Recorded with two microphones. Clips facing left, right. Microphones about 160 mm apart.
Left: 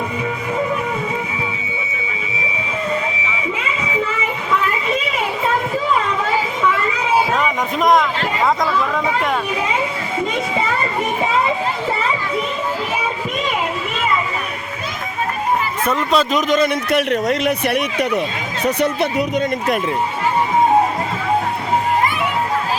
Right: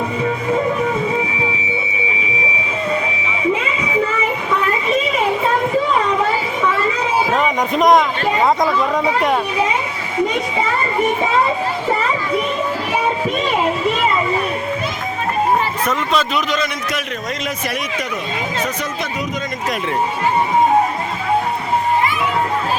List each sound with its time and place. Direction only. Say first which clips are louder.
16.1 s a man's voice: left 6 dB; 45° left (ahead or behind); by 17.5 s 65° left (ahead or behind)